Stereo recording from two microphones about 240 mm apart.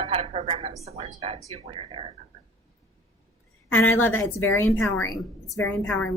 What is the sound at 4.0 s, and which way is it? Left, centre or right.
Speech, centre.